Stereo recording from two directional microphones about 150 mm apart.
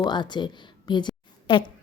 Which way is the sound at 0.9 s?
30° left (ahead or behind).